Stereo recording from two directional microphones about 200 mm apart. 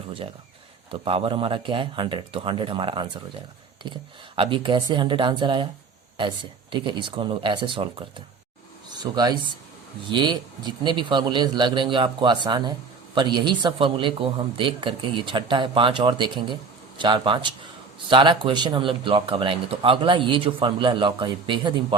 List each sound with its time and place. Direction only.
0.9 s speech: 30° right (ahead or behind)
4.4 s speech: 25° right (ahead or behind)